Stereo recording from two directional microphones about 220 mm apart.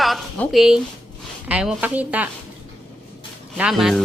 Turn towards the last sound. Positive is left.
turn(degrees=0)  # may be behind; listen again after turning